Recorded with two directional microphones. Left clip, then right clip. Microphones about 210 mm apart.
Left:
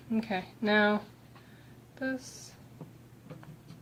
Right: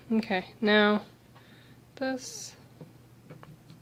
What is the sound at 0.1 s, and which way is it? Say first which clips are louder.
A woman's voice: right 4 dB; 45° right (ahead or behind).